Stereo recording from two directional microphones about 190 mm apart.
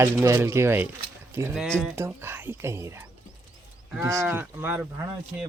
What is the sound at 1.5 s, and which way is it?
Speech, 5° left (ahead or behind).